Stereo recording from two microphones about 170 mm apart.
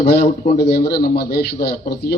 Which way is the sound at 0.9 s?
65° left (ahead or behind).